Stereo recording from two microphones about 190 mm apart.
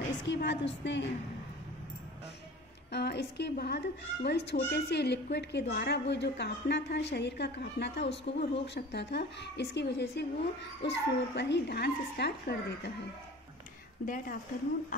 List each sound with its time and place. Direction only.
0.2 s a woman's voice: 70° left (ahead or behind)
2.9 s a woman's voice: 60° left (ahead or behind)
14.0 s a woman's voice: 45° left (ahead or behind)